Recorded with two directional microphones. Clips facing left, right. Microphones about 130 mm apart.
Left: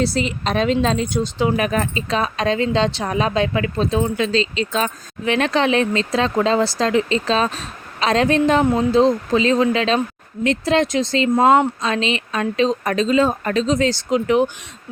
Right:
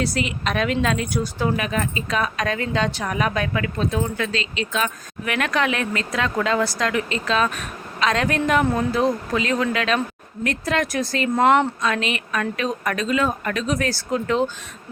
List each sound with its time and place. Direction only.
0.0 s speech: 30° left (ahead or behind)
1.5 s speech: 35° left (ahead or behind); by 14.5 s 15° left (ahead or behind)